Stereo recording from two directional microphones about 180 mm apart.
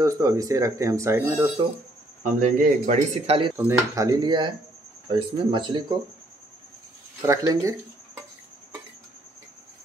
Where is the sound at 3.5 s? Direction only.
15° right (ahead or behind).